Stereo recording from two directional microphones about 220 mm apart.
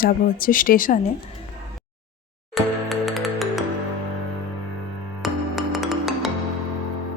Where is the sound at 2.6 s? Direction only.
Centre (ahead or behind).